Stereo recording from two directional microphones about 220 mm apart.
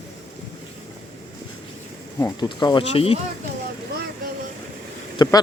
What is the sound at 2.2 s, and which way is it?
Speech, 15° left (ahead or behind).